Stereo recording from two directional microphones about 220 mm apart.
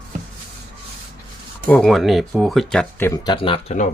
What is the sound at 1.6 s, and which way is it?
Speech, centre (ahead or behind).